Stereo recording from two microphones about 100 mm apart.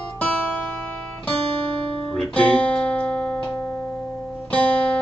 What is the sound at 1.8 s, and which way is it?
Guitar, 65° right (ahead or behind).